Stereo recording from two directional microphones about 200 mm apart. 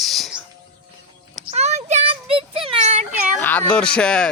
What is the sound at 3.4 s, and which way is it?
Speech, 10° left (ahead or behind).